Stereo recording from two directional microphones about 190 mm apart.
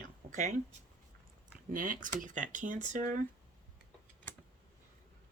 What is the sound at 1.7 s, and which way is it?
Speech, 45° right (ahead or behind).